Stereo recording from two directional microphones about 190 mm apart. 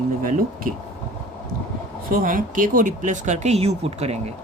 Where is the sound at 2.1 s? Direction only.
45° right (ahead or behind).